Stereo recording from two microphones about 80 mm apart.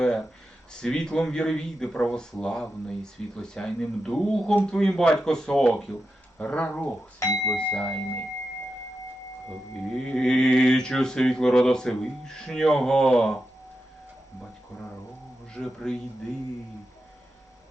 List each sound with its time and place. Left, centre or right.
0.7 s speech: centre
6.4 s speech: centre
7.2 s speech: left
7.5 s speech: centre
9.9 s speech: centre
15.5 s speech: centre